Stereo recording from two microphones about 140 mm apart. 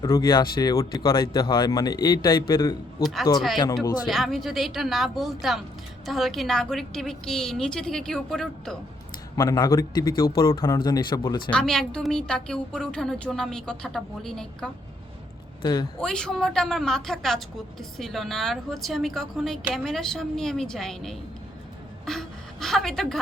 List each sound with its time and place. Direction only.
0.0 s speech: 25° left (ahead or behind)
3.0 s a woman's voice: centre (ahead or behind)
9.3 s speech: 25° left (ahead or behind)
10.8 s speech: 30° left (ahead or behind)
11.5 s a woman's voice: 5° left (ahead or behind)
15.6 s speech: 35° left (ahead or behind)
16.0 s a woman's voice: 5° left (ahead or behind)